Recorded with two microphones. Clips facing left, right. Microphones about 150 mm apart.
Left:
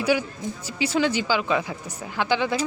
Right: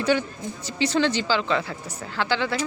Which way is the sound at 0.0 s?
10° left (ahead or behind).